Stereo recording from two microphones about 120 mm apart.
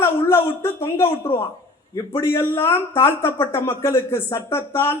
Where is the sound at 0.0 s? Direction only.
20° left (ahead or behind).